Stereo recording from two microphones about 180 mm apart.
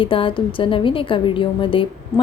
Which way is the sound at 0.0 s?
30° left (ahead or behind).